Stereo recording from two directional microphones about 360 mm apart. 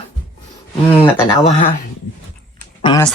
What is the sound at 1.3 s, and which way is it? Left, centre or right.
Speech, centre.